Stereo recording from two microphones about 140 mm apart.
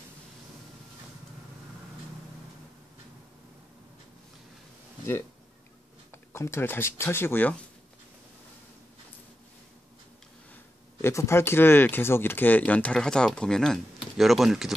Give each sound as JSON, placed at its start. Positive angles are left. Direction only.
{"t": 6.1, "sound": "speech", "side_deg": 20}
{"t": 11.0, "sound": "speech", "side_deg": 20}